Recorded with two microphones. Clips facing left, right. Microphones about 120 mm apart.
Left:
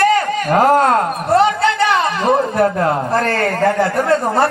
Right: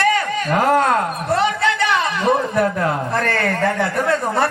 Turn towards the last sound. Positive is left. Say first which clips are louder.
# left 4 dB
turn(degrees=30)  # may be behind; listen again after turning